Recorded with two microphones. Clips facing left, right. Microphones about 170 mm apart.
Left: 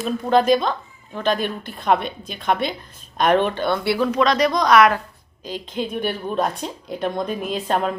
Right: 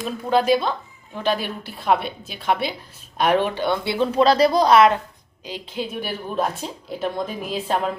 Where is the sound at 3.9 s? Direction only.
30° right (ahead or behind).